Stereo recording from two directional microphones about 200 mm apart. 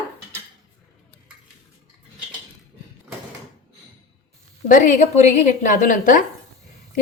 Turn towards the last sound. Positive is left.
turn(degrees=40)  # may be behind; listen again after turning